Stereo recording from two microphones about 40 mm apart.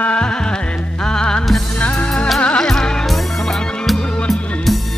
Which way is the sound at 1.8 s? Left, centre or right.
Left.